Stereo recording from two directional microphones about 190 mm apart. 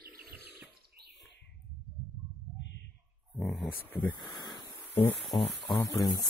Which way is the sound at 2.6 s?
65° left (ahead or behind).